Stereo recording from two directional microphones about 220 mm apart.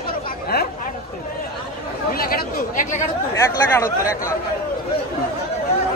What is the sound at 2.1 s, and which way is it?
Speech, 40° left (ahead or behind).